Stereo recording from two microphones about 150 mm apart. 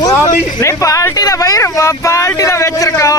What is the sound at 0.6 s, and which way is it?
Speech, 20° left (ahead or behind).